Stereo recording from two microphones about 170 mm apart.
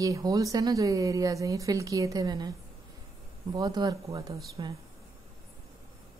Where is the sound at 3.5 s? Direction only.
25° right (ahead or behind).